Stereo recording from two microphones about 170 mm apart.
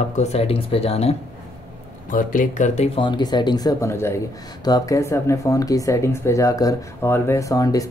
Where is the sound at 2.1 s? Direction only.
50° left (ahead or behind).